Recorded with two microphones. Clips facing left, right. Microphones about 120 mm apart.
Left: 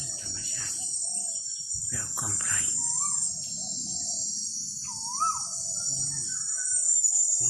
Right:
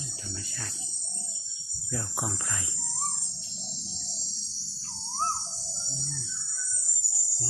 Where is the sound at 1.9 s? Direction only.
30° right (ahead or behind).